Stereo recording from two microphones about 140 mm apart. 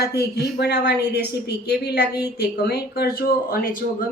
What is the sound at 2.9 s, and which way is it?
Speech, 90° left.